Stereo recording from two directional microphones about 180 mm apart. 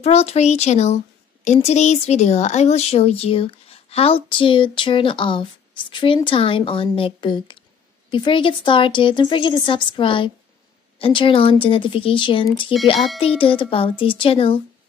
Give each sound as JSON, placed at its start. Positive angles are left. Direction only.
{"t": 0.0, "sound": "a woman's voice", "side_deg": 35}